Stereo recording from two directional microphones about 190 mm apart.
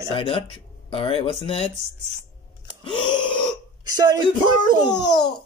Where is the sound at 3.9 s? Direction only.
20° right (ahead or behind).